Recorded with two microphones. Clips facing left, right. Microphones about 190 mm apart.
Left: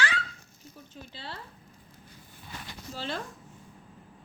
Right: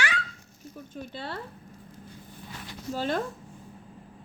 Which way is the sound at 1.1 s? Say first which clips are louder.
Right 5 dB; 50° right (ahead or behind).